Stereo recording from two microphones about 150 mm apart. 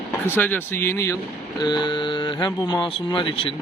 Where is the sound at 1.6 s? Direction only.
30° left (ahead or behind).